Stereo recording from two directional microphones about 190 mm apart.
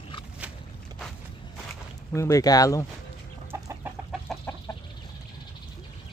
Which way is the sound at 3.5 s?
10° right (ahead or behind).